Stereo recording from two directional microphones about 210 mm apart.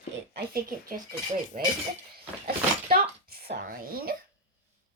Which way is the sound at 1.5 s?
35° right (ahead or behind).